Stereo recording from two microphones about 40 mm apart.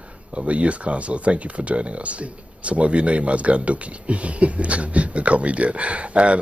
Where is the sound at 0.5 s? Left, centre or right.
Right.